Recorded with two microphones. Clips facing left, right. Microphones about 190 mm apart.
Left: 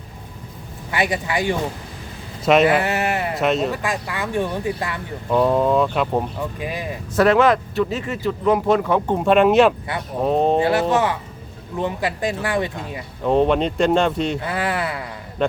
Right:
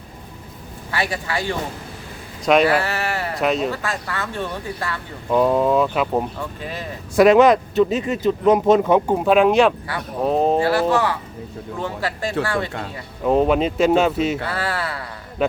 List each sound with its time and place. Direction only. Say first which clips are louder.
0.9 s speech: left 3 dB; 20° left (ahead or behind)
2.4 s speech: left 1 dB; centre (ahead or behind)
2.6 s speech: left 2 dB; 20° left (ahead or behind)
3.3 s speech: right 1 dB; centre (ahead or behind)
3.7 s speech: left 1 dB; 15° left (ahead or behind)
5.3 s speech: even; centre (ahead or behind)
6.6 s speech: left 3 dB; 10° left (ahead or behind)
7.2 s speech: right 3 dB; 15° right (ahead or behind)
9.0 s speech: even; centre (ahead or behind)
10.6 s speech: even; 20° left (ahead or behind)
13.2 s speech: even; 5° right (ahead or behind)
14.4 s speech: left 2 dB; 20° left (ahead or behind)
15.4 s speech: even; 5° right (ahead or behind)